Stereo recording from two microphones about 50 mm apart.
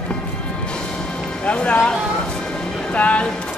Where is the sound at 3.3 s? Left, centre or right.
Left.